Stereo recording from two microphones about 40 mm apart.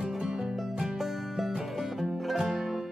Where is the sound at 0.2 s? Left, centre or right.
Centre.